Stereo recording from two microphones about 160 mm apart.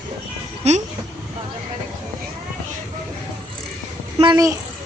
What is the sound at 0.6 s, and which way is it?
Speech, 45° right (ahead or behind).